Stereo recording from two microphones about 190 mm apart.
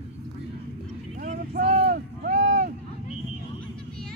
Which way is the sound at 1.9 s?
50° right (ahead or behind).